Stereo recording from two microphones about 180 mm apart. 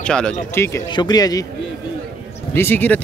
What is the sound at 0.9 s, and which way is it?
Speech, 20° left (ahead or behind).